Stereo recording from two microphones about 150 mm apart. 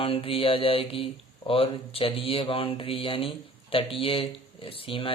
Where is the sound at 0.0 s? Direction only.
35° left (ahead or behind).